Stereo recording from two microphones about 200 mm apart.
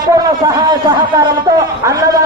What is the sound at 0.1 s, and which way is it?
A man's voice, 20° right (ahead or behind).